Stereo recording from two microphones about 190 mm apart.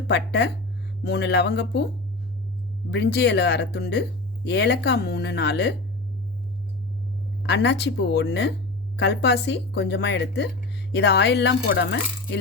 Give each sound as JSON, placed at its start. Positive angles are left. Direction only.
{"t": 0.1, "sound": "speech", "side_deg": 65}
{"t": 2.9, "sound": "speech", "side_deg": 65}
{"t": 7.4, "sound": "speech", "side_deg": 65}